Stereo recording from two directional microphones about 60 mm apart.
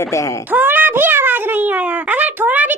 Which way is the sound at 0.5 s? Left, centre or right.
Right.